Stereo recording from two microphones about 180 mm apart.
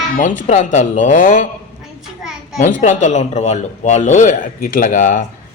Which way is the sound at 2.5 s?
45° left (ahead or behind).